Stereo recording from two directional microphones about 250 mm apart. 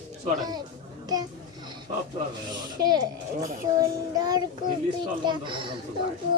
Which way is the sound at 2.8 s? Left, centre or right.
Centre.